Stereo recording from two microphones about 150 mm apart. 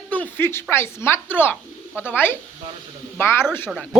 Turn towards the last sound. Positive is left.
turn(degrees=0)  # may be behind; listen again after turning